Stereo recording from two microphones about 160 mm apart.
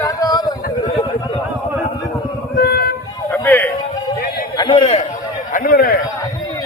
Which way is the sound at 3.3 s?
10° left (ahead or behind).